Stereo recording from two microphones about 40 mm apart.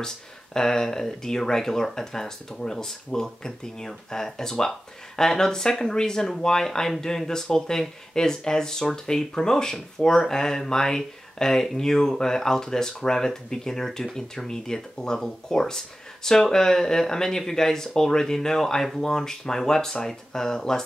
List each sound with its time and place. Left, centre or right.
0.6 s speech: centre